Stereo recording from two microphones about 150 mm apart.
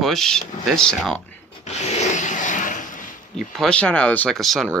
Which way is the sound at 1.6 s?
50° left (ahead or behind).